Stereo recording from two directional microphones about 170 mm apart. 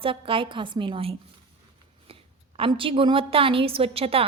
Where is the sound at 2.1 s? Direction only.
35° right (ahead or behind).